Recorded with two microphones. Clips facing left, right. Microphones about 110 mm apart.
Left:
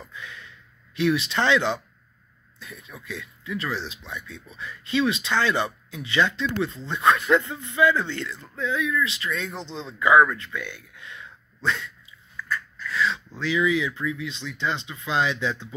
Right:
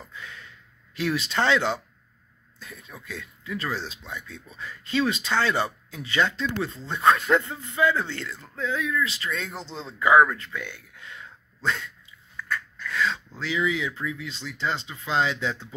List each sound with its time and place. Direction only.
0.1 s a sound: 40° right (ahead or behind)
0.9 s speech: 40° right (ahead or behind)
2.6 s speech: 40° right (ahead or behind)
12.9 s speech: 45° right (ahead or behind)
13.4 s speech: 30° right (ahead or behind)